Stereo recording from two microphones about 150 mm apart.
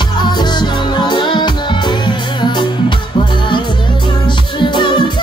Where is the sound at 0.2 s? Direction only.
30° left (ahead or behind).